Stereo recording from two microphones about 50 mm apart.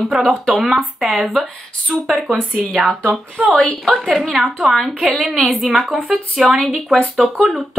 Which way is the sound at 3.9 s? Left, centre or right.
Centre.